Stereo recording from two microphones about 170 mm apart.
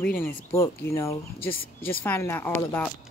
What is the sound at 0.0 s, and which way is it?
Speech, 10° left (ahead or behind).